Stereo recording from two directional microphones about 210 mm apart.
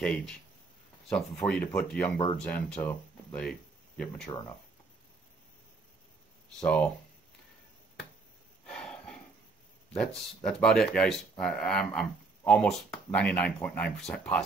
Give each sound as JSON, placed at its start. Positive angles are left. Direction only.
{"t": 0.0, "sound": "speech", "side_deg": 5}
{"t": 6.6, "sound": "speech", "side_deg": 5}
{"t": 8.7, "sound": "a sound", "side_deg": 5}
{"t": 9.9, "sound": "speech", "side_deg": 5}